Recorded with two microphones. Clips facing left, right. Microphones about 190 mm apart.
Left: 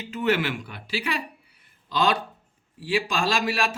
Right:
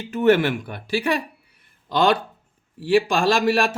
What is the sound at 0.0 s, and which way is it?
Speech, 50° right (ahead or behind).